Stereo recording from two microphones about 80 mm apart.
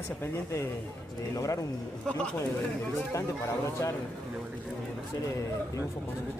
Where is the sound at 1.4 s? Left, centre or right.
Left.